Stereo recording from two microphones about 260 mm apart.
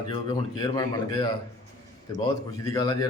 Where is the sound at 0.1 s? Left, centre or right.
Centre.